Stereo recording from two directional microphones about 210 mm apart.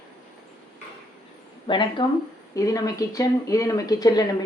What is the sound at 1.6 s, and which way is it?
Speech, 25° left (ahead or behind).